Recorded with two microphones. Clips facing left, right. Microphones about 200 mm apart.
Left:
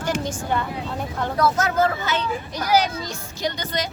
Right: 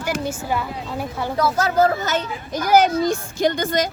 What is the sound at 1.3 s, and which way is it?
A child's voice, 30° right (ahead or behind).